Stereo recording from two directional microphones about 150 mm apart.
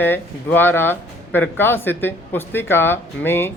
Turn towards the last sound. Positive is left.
turn(degrees=15)  # may be behind; listen again after turning